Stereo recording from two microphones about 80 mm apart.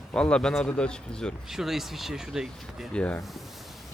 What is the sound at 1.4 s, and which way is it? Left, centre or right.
Speech, centre.